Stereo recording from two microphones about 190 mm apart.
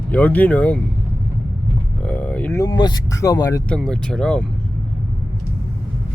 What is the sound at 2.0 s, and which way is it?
Speech, 5° left (ahead or behind).